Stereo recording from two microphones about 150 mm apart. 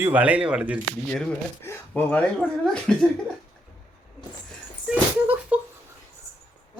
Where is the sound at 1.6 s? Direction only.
10° left (ahead or behind).